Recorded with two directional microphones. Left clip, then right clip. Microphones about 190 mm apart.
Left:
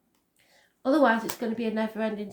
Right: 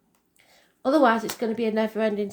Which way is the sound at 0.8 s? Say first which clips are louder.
Right 3 dB; 40° right (ahead or behind).